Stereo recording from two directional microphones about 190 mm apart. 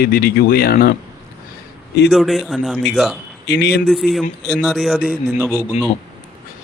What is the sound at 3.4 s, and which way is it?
Speech, 60° left (ahead or behind).